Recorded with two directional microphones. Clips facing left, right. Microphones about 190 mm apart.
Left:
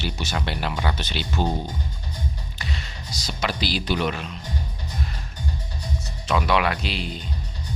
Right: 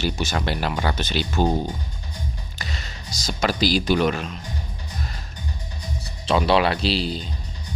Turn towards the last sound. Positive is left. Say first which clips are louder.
# right 6 dB
turn(degrees=-30)  # may be behind; listen again after turning